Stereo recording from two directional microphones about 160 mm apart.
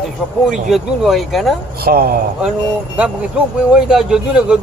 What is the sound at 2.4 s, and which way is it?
Speech, 5° right (ahead or behind).